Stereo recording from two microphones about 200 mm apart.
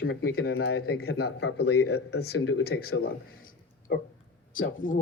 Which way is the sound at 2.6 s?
50° left (ahead or behind).